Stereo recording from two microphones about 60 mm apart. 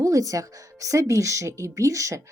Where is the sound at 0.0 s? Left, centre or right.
Right.